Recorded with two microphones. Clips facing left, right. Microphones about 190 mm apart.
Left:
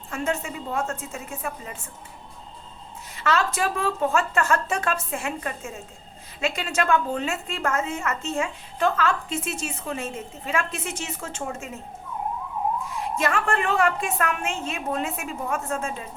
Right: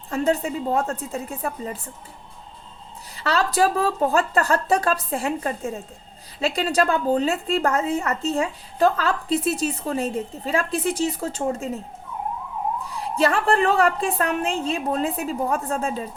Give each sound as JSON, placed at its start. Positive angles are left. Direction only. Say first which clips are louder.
{"t": 0.1, "sound": "a woman's voice", "louder": "right 6 dB", "side_deg": -35}
{"t": 3.2, "sound": "a woman's voice", "louder": "right 4 dB", "side_deg": -35}
{"t": 12.8, "sound": "a woman's voice", "louder": "right 4 dB", "side_deg": -35}